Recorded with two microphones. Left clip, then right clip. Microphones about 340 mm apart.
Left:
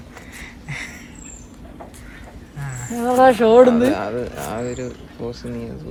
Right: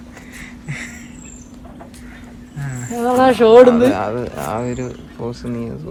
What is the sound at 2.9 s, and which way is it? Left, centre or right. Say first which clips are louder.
Speech: even; centre.